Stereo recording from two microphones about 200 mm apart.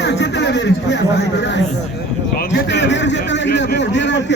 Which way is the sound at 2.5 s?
60° left (ahead or behind).